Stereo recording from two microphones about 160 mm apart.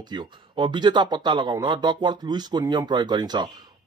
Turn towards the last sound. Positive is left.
turn(degrees=-25)  # may be behind; listen again after turning